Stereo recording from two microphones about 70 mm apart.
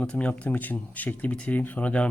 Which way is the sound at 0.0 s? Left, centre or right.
Centre.